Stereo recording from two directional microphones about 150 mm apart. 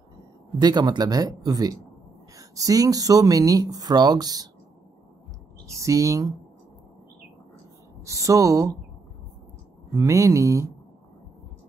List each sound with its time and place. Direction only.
0.6 s speech: 30° right (ahead or behind)
5.7 s speech: 20° right (ahead or behind)
8.0 s speech: 20° right (ahead or behind)
9.9 s speech: 20° right (ahead or behind)